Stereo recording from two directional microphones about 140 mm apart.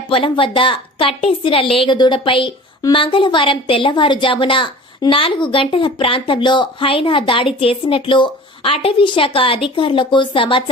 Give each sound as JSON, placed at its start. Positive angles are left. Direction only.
{"t": 0.1, "sound": "a woman's voice", "side_deg": 40}